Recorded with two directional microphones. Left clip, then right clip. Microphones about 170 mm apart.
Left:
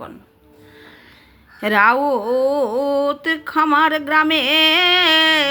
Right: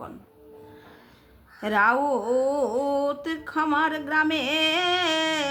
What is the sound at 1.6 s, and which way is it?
Speech, 20° left (ahead or behind).